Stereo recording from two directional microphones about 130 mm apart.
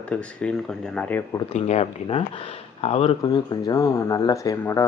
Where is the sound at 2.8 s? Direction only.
50° left (ahead or behind).